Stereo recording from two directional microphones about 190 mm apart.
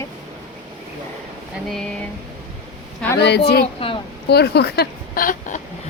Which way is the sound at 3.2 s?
60° left (ahead or behind).